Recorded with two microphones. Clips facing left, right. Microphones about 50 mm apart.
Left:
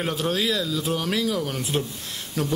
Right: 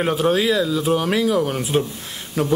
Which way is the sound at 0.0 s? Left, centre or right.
Centre.